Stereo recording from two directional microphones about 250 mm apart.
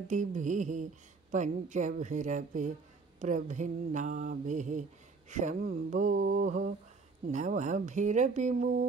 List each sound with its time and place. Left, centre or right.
0.1 s mantra: right